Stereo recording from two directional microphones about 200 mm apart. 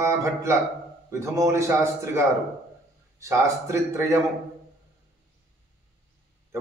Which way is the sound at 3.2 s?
15° right (ahead or behind).